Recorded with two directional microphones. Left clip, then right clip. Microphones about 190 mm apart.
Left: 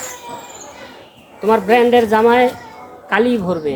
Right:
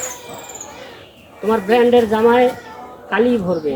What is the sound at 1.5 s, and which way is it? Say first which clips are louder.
Speech: left 1 dB; 25° left (ahead or behind).